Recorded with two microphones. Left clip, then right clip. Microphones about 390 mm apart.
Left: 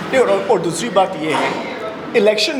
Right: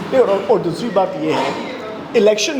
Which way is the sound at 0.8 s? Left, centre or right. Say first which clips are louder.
Left 1 dB; centre.